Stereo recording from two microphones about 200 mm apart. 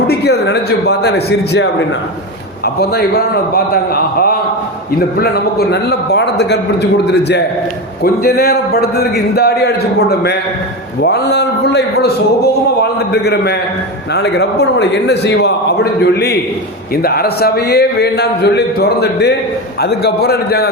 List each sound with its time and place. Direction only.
0.1 s a man's voice: 55° left (ahead or behind)
2.8 s a man's voice: 55° left (ahead or behind)